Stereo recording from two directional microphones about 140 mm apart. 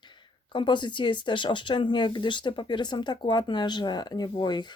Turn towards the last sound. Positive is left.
turn(degrees=30)  # may be behind; listen again after turning